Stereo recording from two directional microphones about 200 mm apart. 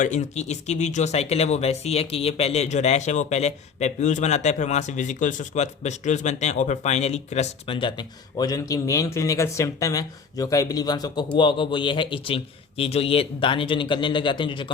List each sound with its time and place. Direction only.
0.0 s speech: 35° left (ahead or behind)